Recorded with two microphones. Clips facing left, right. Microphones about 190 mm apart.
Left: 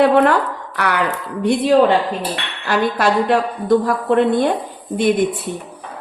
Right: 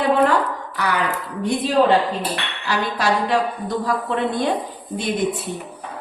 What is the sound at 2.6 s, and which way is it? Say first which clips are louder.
Speech: left 5 dB; 55° left (ahead or behind).